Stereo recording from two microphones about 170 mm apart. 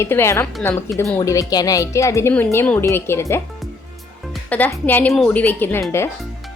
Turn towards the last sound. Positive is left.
turn(degrees=10)  # may be behind; listen again after turning